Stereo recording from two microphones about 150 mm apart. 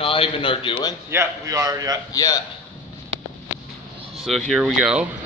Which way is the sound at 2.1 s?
25° left (ahead or behind).